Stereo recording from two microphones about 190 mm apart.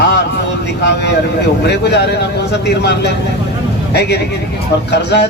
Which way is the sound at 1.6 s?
60° left (ahead or behind).